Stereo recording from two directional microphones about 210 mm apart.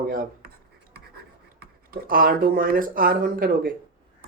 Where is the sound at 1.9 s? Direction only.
45° right (ahead or behind).